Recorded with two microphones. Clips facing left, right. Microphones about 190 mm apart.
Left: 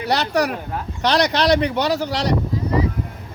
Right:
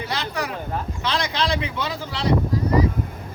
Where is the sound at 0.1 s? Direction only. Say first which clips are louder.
Left 11 dB; 70° left (ahead or behind).